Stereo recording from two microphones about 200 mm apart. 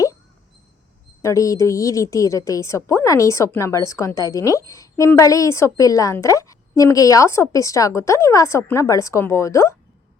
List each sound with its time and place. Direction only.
1.2 s a woman's voice: 15° left (ahead or behind)